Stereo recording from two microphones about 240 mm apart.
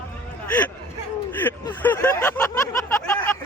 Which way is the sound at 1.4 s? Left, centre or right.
Centre.